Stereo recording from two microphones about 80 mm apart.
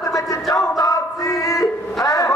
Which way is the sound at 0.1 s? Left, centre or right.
Left.